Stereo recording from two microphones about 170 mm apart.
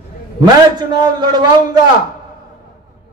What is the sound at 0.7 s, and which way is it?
Speech, 25° right (ahead or behind).